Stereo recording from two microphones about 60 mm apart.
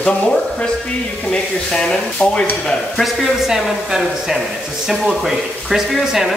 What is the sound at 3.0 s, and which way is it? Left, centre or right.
Speech, centre.